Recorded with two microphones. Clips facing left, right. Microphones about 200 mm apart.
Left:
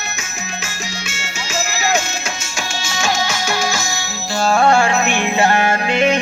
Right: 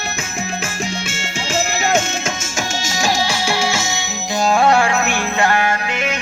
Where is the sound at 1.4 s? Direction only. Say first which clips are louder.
Right 2 dB; 55° right (ahead or behind); by 4.8 s 15° right (ahead or behind).